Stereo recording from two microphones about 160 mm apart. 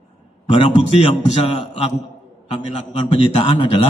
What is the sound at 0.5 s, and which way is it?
A man's voice, 35° left (ahead or behind).